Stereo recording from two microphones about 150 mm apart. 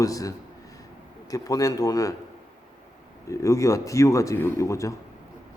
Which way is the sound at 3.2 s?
20° left (ahead or behind).